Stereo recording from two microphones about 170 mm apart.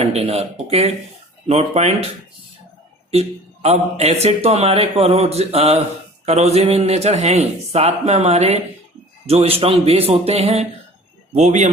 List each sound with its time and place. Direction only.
0.0 s a man's voice: 40° right (ahead or behind)
3.1 s a man's voice: 40° right (ahead or behind)